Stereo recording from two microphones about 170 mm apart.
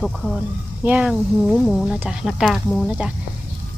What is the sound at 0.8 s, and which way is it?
Speech, 10° right (ahead or behind).